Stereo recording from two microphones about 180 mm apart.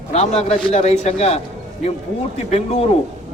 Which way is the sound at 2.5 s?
35° left (ahead or behind).